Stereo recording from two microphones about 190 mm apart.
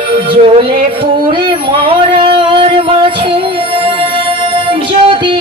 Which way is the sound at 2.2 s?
25° right (ahead or behind).